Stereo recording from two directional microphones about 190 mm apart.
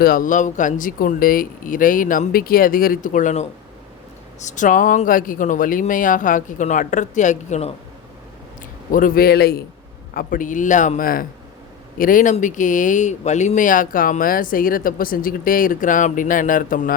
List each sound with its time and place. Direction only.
0.0 s speech: 50° left (ahead or behind)
8.9 s speech: 45° left (ahead or behind)